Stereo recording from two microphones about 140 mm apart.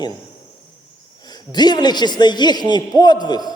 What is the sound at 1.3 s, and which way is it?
A man's voice, 30° left (ahead or behind).